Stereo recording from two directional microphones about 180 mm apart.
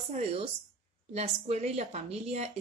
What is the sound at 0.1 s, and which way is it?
A woman's voice, 35° right (ahead or behind).